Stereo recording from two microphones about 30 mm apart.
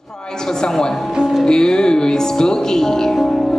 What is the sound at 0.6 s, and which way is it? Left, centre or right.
Speech, centre.